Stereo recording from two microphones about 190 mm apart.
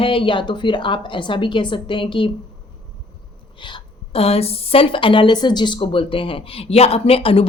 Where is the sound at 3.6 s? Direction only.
30° left (ahead or behind).